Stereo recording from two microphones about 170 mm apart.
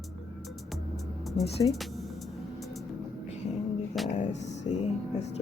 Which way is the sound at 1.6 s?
Centre (ahead or behind).